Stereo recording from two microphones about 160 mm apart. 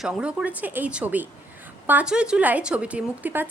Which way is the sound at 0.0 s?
5° right (ahead or behind).